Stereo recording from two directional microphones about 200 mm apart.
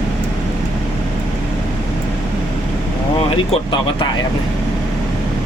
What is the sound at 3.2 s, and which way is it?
Speech, 25° left (ahead or behind).